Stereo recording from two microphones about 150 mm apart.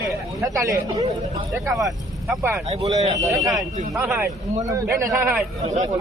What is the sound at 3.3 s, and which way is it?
Speech, centre (ahead or behind).